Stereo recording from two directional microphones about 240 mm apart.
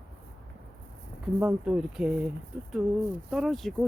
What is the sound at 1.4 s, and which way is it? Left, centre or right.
Speech, centre.